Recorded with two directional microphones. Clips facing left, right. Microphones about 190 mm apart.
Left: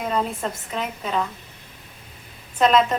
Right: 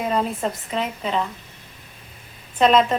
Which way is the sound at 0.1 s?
Centre (ahead or behind).